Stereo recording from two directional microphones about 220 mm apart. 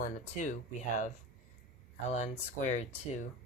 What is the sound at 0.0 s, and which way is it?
Speech, 35° left (ahead or behind).